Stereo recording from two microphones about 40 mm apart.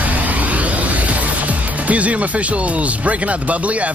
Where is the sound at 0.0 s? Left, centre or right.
Right.